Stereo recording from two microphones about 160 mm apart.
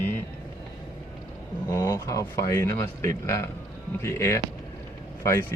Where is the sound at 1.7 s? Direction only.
20° left (ahead or behind).